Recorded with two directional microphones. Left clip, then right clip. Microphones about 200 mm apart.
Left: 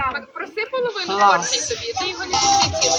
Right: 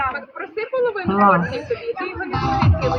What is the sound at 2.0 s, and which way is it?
Music, 50° right (ahead or behind).